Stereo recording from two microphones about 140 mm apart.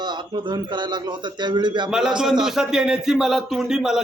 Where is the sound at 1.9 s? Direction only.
5° right (ahead or behind).